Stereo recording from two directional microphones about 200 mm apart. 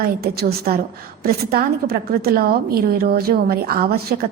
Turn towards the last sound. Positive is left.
turn(degrees=-50)  # may be behind; listen again after turning